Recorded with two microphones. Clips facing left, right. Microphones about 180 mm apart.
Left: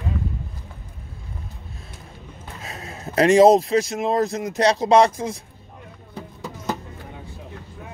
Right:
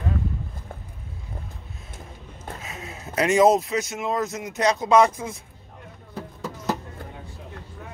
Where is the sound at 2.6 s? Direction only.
35° left (ahead or behind).